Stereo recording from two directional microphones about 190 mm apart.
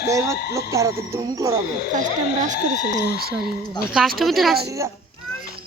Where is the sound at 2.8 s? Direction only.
55° left (ahead or behind).